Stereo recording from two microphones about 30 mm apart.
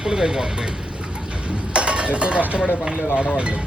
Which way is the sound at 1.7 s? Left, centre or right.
Right.